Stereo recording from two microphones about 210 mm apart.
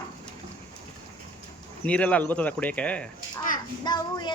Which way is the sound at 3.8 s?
20° left (ahead or behind).